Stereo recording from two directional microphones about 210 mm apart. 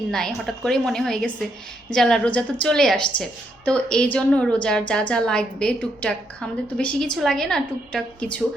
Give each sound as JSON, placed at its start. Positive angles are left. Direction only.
{"t": 0.1, "sound": "a woman's voice", "side_deg": 5}